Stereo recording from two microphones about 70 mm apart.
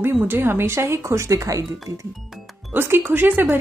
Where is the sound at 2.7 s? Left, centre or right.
Right.